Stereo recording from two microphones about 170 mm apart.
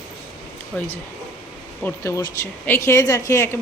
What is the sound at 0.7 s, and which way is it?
Speech, 5° left (ahead or behind).